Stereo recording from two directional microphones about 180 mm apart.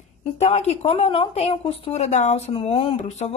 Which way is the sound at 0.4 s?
35° left (ahead or behind).